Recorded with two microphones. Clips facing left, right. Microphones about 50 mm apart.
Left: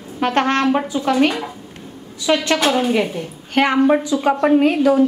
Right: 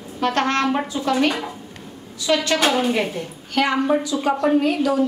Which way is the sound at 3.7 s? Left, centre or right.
Left.